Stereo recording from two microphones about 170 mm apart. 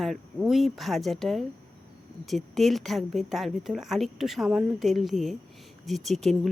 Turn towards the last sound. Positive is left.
turn(degrees=0)  # may be behind; listen again after turning